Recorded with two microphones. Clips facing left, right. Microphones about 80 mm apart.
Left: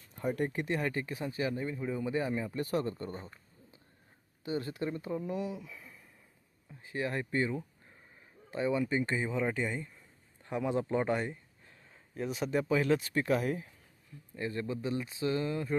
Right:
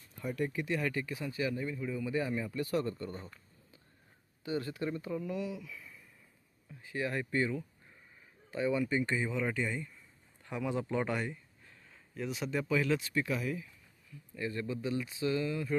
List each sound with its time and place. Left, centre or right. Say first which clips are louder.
0.2 s speech: left 2 dB; left
2.6 s speech: even; left
3.0 s a sound: left 1 dB; left
4.4 s speech: left 1 dB; left
14.3 s speech: left 1 dB; left